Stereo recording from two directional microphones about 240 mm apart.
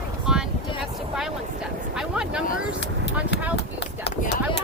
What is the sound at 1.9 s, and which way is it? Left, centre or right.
Speech, centre.